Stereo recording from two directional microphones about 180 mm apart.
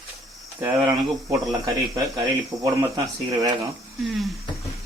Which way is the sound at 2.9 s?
20° right (ahead or behind).